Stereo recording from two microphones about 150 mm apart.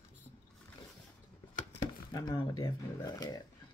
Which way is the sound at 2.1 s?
25° left (ahead or behind).